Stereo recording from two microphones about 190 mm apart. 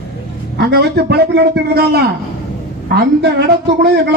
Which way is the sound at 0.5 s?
60° right (ahead or behind).